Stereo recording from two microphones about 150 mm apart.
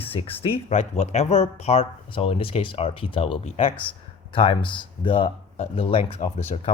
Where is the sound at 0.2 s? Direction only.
35° left (ahead or behind).